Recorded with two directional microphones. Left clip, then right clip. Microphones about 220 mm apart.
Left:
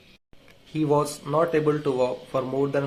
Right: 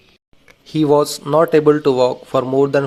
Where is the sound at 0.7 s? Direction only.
40° right (ahead or behind).